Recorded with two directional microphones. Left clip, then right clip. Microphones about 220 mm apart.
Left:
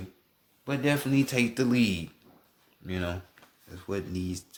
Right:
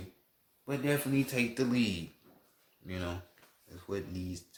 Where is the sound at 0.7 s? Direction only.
40° left (ahead or behind).